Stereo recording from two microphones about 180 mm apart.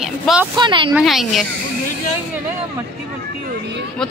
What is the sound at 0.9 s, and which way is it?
Speech, 5° right (ahead or behind).